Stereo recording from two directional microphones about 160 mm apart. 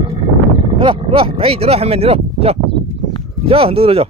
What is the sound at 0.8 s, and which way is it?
Speech, 30° right (ahead or behind).